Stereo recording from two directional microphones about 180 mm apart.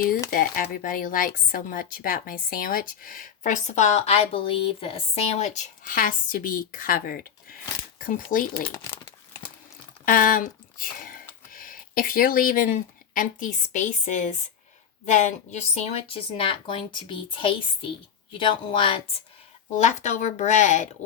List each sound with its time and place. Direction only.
0.3 s speech: 55° left (ahead or behind)
8.7 s speech: 15° left (ahead or behind)
10.1 s a woman's voice: 50° left (ahead or behind); by 18.9 s 30° left (ahead or behind)
19.8 s speech: 40° left (ahead or behind)